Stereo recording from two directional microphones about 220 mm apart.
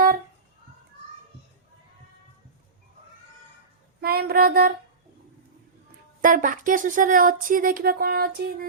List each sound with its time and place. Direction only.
4.0 s female singing: 45° right (ahead or behind)
6.2 s speech: 40° right (ahead or behind)